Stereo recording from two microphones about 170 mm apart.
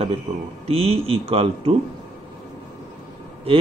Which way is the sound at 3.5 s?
35° right (ahead or behind).